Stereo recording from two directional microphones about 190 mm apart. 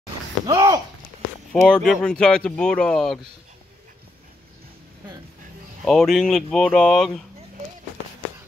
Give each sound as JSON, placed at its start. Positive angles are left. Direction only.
{"t": 0.5, "sound": "speech", "side_deg": -20}
{"t": 1.5, "sound": "speech", "side_deg": 5}
{"t": 5.9, "sound": "speech", "side_deg": 0}